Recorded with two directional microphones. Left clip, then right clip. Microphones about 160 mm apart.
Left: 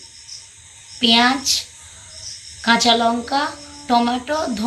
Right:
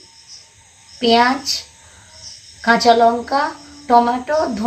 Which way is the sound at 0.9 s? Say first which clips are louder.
Right 1 dB; 70° right (ahead or behind).